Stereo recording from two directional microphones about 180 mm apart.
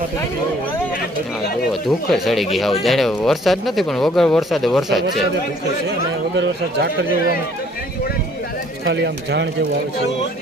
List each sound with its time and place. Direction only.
1.7 s speech: centre (ahead or behind)
6.3 s speech: 90° right
8.8 s speech: 70° right (ahead or behind)